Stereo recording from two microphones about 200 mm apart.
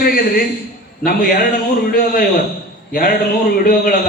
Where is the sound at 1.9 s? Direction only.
45° left (ahead or behind).